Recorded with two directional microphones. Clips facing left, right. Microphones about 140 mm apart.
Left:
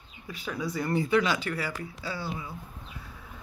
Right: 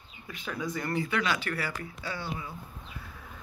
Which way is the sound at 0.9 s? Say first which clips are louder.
Left 5 dB; 25° left (ahead or behind).